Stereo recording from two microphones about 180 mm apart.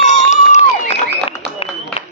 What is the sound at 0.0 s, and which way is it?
Crowd, 40° left (ahead or behind).